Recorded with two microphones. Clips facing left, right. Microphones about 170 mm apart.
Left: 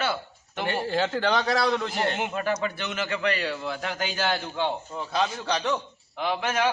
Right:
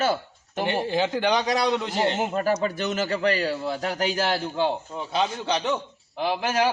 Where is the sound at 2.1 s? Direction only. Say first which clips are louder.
Right 4 dB; 35° right (ahead or behind).